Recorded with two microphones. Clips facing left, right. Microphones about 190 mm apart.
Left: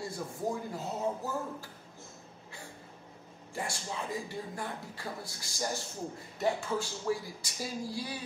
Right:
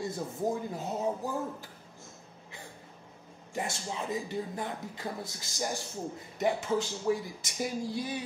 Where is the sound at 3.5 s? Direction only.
20° right (ahead or behind).